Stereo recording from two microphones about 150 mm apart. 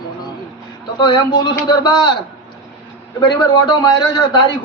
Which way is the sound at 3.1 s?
30° left (ahead or behind).